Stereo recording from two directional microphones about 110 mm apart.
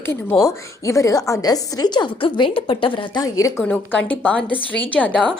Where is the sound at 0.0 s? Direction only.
20° left (ahead or behind); by 3.1 s 50° left (ahead or behind).